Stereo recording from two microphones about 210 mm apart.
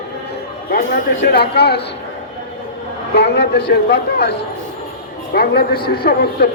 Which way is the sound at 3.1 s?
55° left (ahead or behind).